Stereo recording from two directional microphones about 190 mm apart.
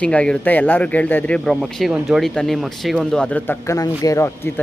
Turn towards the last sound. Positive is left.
turn(degrees=15)  # may be behind; listen again after turning